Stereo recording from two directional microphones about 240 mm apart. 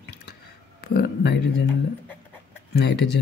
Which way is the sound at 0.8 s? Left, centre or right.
Left.